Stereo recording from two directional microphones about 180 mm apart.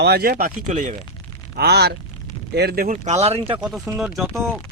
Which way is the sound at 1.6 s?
65° right (ahead or behind).